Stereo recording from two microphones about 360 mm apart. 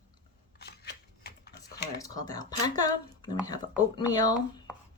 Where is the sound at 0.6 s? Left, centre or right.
Left.